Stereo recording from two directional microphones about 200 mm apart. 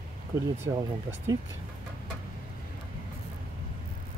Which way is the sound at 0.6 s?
15° right (ahead or behind).